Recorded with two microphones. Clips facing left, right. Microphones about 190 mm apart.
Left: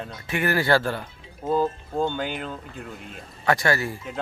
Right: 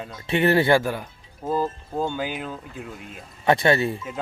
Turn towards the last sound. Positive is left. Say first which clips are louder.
# right 4 dB
turn(degrees=-25)  # may be behind; listen again after turning